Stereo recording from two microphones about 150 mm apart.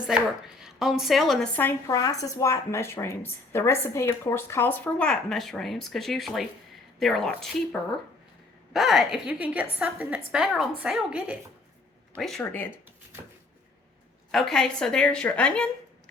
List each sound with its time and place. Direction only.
0.0 s a woman's voice: 5° right (ahead or behind)
1.9 s a woman's voice: 25° left (ahead or behind); by 11.3 s 5° right (ahead or behind)
12.1 s a woman's voice: 5° left (ahead or behind)
14.3 s a woman's voice: centre (ahead or behind)